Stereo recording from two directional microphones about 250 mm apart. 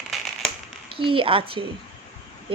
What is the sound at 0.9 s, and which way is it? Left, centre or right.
Speech, right.